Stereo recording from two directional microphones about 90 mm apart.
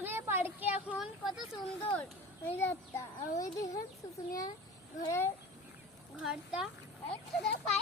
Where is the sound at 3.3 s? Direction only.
40° left (ahead or behind).